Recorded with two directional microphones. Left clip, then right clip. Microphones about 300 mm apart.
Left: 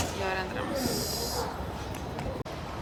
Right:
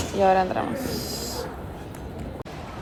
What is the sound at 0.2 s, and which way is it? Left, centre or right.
Speech, centre.